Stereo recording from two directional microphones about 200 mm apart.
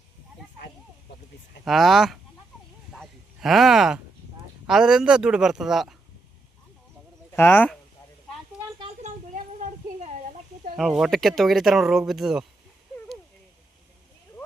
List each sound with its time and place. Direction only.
1.6 s speech: centre (ahead or behind)
2.9 s a sound: centre (ahead or behind)
4.6 s speech: 5° right (ahead or behind)
7.3 s speech: 10° left (ahead or behind)
8.8 s a sound: 35° right (ahead or behind)
10.8 s speech: centre (ahead or behind)